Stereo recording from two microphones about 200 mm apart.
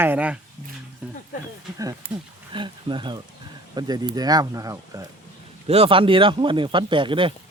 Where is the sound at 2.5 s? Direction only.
25° right (ahead or behind).